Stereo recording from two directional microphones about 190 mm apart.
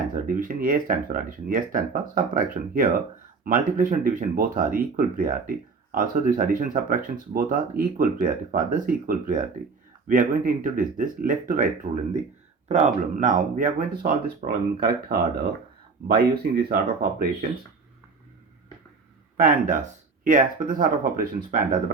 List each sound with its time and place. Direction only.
0.1 s speech: 45° right (ahead or behind)
19.4 s speech: 45° right (ahead or behind)